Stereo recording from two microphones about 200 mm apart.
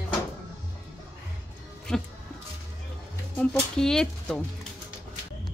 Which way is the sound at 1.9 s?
5° left (ahead or behind).